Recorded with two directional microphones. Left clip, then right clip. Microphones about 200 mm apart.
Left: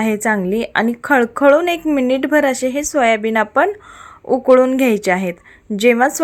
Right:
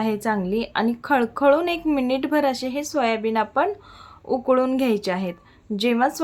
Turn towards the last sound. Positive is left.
turn(degrees=25)  # may be behind; listen again after turning